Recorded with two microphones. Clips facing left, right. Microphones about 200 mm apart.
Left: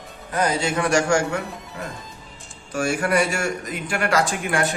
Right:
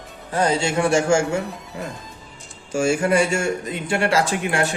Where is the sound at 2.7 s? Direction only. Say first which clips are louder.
Right 3 dB; 25° right (ahead or behind).